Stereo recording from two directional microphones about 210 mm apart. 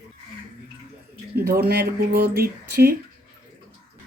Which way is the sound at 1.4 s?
45° right (ahead or behind).